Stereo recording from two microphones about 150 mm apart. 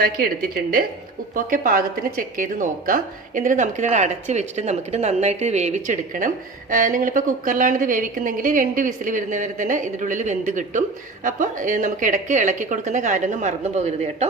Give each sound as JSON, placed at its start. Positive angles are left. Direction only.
{"t": 0.0, "sound": "a woman's voice", "side_deg": -80}
{"t": 1.5, "sound": "a woman's voice", "side_deg": -65}